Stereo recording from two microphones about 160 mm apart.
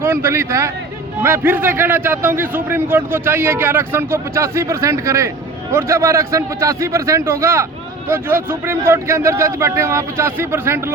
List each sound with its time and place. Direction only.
0.0 s speech: 15° right (ahead or behind)